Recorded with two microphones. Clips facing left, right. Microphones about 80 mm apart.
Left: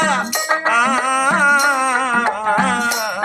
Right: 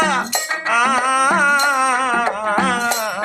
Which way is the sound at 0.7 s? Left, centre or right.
Centre.